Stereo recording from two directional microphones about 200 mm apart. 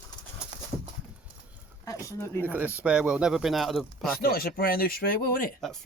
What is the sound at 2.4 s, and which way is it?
Speech, 10° right (ahead or behind).